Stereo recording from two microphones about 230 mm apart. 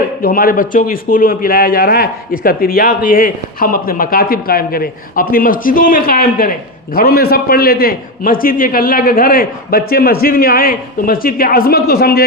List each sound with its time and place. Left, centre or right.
0.2 s a man's voice: left